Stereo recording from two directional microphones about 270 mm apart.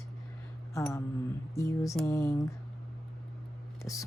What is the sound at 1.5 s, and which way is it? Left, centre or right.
Speech, centre.